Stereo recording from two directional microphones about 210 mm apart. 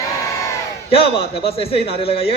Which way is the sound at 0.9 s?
25° left (ahead or behind).